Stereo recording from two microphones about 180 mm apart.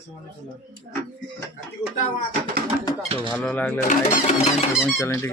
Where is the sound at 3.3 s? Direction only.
10° left (ahead or behind).